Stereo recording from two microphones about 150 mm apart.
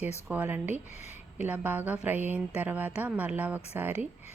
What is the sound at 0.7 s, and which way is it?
Speech, 50° left (ahead or behind).